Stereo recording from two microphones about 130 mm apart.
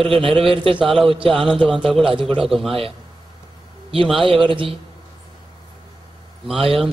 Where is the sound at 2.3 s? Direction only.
Centre (ahead or behind).